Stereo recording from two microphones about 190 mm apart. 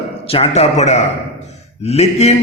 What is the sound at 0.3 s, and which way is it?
A man's voice, 30° left (ahead or behind).